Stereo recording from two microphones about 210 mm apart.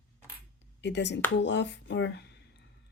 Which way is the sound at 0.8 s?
55° left (ahead or behind).